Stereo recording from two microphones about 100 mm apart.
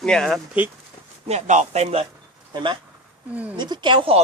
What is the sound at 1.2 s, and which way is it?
Speech, 90° right.